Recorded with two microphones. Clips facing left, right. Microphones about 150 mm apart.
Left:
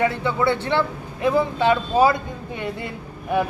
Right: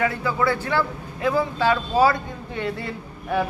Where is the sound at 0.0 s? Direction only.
25° left (ahead or behind).